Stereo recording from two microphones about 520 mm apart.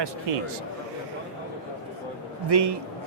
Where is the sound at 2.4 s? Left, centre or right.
Right.